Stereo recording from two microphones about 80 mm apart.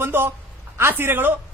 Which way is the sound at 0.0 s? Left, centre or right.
Right.